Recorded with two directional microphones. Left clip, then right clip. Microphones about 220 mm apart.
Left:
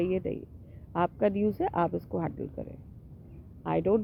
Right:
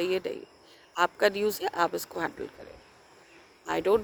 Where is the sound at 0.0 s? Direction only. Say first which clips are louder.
Right 1 dB; 20° right (ahead or behind).